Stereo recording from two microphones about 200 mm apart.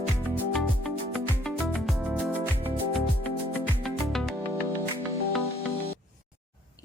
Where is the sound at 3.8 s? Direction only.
Centre (ahead or behind).